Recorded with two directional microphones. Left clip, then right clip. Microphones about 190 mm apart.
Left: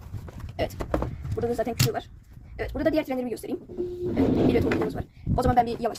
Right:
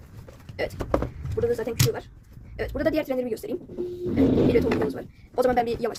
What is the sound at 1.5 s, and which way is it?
Speech, 25° left (ahead or behind).